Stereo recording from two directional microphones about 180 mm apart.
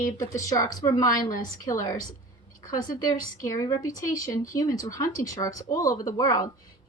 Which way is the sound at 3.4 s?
20° left (ahead or behind).